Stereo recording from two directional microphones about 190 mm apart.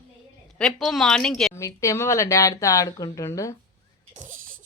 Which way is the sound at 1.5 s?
15° left (ahead or behind).